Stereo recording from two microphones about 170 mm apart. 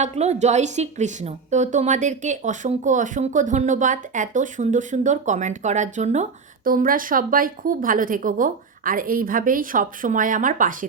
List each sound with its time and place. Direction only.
0.0 s a woman's voice: 40° right (ahead or behind)
6.7 s a woman's voice: 55° right (ahead or behind)